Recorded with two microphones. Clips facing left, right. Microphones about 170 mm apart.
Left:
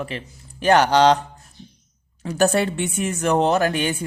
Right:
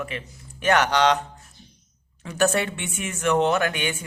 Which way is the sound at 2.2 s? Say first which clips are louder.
Left 3 dB; 35° left (ahead or behind).